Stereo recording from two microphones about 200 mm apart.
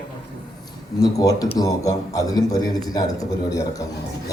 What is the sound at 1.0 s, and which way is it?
A man's voice, 20° left (ahead or behind).